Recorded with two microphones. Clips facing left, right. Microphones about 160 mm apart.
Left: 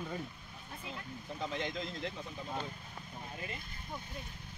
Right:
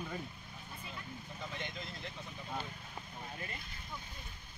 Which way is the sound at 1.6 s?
90° left.